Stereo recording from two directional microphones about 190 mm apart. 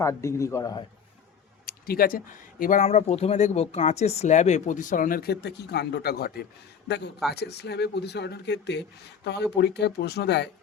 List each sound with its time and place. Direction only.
0.0 s speech: 15° left (ahead or behind)
1.6 s speech: 50° left (ahead or behind)
2.8 s speech: 35° left (ahead or behind); by 10.5 s 65° left (ahead or behind)